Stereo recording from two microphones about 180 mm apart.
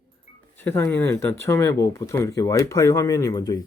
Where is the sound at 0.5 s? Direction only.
15° left (ahead or behind).